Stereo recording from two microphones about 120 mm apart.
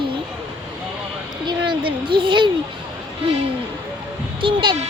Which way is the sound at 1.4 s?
40° right (ahead or behind).